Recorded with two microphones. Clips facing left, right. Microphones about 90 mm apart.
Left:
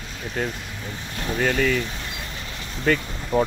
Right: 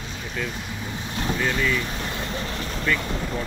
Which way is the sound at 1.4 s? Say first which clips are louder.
Left 4 dB; 55° left (ahead or behind).